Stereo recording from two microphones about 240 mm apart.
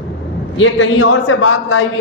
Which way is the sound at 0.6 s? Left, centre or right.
Left.